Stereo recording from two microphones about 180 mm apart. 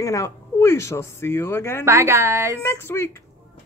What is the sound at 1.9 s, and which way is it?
Speech, 15° right (ahead or behind).